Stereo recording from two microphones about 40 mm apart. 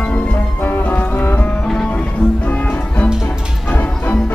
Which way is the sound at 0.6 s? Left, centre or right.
Left.